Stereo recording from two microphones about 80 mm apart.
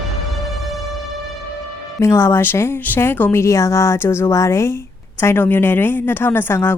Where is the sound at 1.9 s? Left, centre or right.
Left.